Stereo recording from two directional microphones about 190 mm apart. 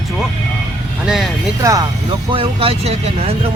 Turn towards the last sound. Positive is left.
turn(degrees=-30)  # may be behind; listen again after turning